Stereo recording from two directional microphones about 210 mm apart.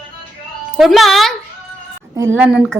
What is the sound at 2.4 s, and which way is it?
Speech, 5° right (ahead or behind).